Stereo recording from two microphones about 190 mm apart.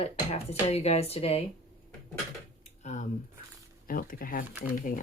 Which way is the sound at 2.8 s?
40° left (ahead or behind).